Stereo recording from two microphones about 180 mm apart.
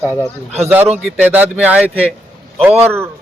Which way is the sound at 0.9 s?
10° right (ahead or behind).